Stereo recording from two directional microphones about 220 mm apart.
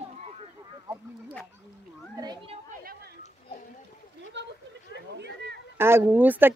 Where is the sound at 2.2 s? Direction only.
20° right (ahead or behind).